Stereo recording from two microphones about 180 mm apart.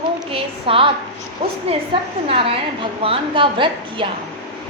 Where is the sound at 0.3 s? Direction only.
30° right (ahead or behind).